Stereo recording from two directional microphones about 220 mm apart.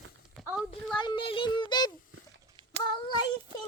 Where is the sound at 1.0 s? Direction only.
20° left (ahead or behind).